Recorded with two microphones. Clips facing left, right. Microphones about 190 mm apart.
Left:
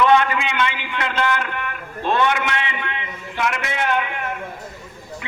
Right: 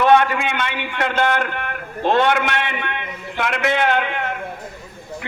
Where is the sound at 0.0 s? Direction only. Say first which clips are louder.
Right 2 dB; 55° right (ahead or behind).